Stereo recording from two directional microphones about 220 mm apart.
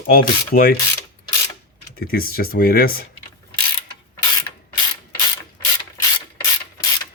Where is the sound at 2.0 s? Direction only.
45° left (ahead or behind).